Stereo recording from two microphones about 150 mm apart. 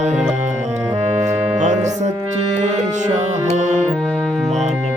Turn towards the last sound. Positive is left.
turn(degrees=-55)  # may be behind; listen again after turning